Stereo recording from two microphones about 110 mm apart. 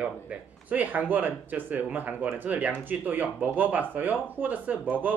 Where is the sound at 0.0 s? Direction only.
10° right (ahead or behind).